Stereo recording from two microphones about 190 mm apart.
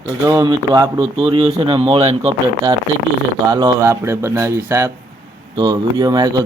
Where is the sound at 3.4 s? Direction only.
20° right (ahead or behind).